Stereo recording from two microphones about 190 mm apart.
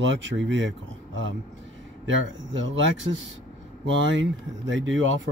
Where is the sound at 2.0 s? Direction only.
80° right.